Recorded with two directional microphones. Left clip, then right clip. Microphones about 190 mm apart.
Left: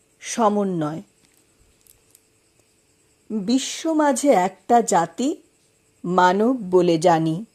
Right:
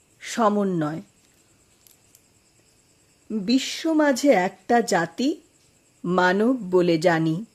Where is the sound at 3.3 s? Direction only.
5° left (ahead or behind).